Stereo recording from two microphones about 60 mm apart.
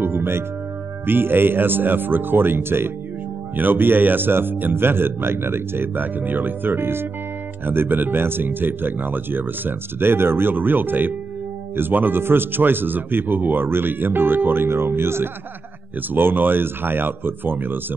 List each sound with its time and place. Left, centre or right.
0.0 s music: right
1.0 s speech: right